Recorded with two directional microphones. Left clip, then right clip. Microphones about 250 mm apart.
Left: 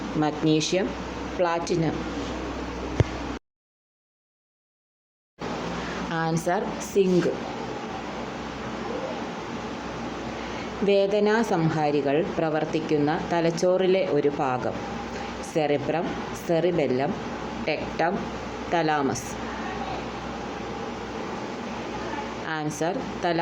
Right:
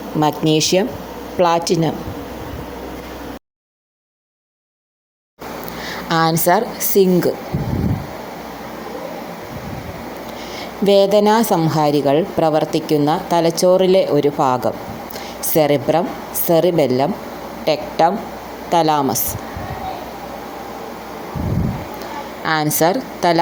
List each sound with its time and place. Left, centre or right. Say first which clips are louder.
0.2 s speech: right 8 dB; right
6.1 s a woman's voice: right 12 dB; right
10.8 s speech: right 9 dB; right
22.4 s speech: right 13 dB; right